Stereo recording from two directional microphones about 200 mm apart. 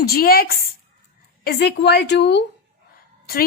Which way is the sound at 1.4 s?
55° left (ahead or behind).